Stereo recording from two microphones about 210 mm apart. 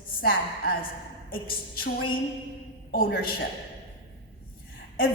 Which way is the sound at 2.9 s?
45° left (ahead or behind).